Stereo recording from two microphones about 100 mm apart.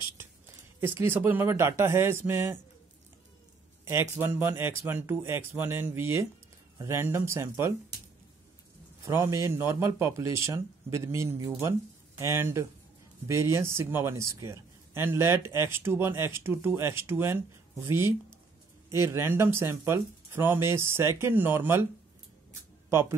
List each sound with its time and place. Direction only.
0.7 s a man's voice: 20° right (ahead or behind)
3.8 s a man's voice: 25° right (ahead or behind)
9.0 s a man's voice: 25° right (ahead or behind)
22.8 s speech: 25° right (ahead or behind)